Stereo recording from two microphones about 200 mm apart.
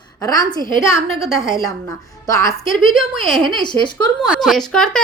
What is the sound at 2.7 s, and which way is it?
A woman's voice, centre (ahead or behind).